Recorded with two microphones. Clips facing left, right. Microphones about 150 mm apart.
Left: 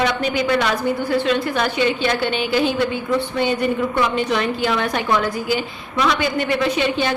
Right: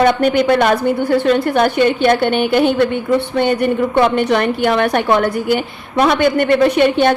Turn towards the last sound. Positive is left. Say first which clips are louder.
# right 8 dB
turn(degrees=-55)  # may be behind; listen again after turning